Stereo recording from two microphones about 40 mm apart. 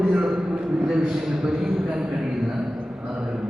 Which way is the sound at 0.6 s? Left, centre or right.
Centre.